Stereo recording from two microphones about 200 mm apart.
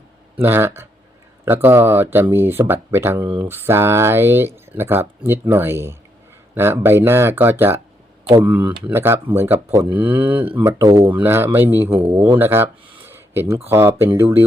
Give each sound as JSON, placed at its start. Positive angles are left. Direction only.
{"t": 0.4, "sound": "speech", "side_deg": -10}
{"t": 11.9, "sound": "speech", "side_deg": -30}
{"t": 12.4, "sound": "speech", "side_deg": -10}